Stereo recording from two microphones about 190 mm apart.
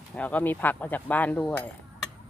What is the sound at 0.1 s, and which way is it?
Speech, 10° left (ahead or behind).